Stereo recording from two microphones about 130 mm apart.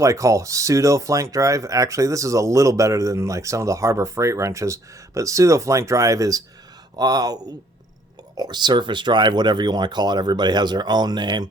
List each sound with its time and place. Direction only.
0.0 s speech: 25° right (ahead or behind)